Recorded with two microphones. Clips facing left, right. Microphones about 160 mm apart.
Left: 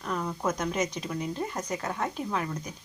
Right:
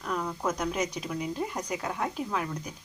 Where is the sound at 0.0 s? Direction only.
Centre (ahead or behind).